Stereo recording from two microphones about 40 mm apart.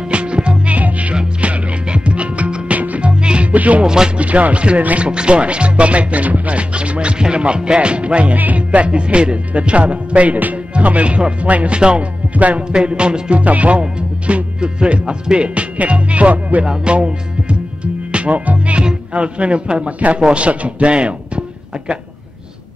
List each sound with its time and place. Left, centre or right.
0.1 s music: right
0.7 s music: right
3.0 s music: right
3.5 s music: right
3.8 s music: centre
4.2 s music: right
12.4 s music: right
12.7 s music: right
16.6 s music: right
18.1 s speech: right
18.8 s music: right
20.2 s a man's voice: right